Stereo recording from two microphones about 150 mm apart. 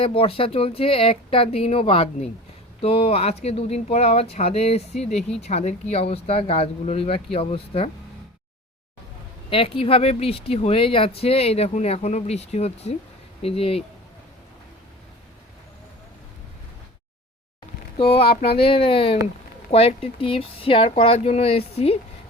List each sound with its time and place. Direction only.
0.0 s speech: 40° left (ahead or behind)
9.5 s speech: 40° left (ahead or behind)
18.4 s speech: 40° left (ahead or behind)